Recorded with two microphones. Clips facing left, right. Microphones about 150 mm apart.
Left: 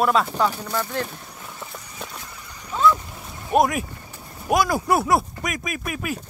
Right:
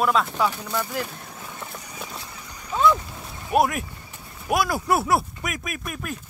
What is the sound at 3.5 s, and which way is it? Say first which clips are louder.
Speech: left 2 dB; 5° right (ahead or behind).